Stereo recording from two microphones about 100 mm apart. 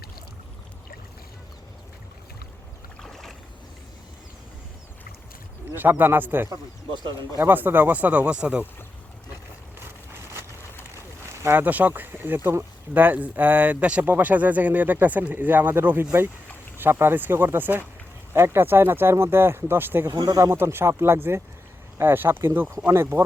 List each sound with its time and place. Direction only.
3.0 s boat: 5° left (ahead or behind)
5.7 s speech: 20° right (ahead or behind)
6.5 s speech: 50° right (ahead or behind)
7.3 s speech: 20° right (ahead or behind)
11.4 s speech: 20° right (ahead or behind)
20.1 s speech: 35° right (ahead or behind)